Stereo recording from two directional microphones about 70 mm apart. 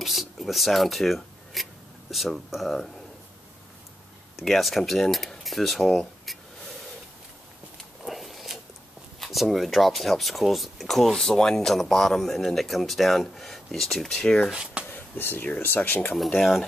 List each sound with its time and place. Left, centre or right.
0.0 s speech: centre
4.4 s speech: centre
7.7 s a sound: centre
9.2 s speech: centre
14.5 s speech: centre
15.1 s speech: left
16.1 s speech: centre